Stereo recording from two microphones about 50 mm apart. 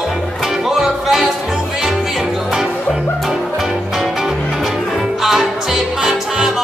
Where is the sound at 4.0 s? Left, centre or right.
Centre.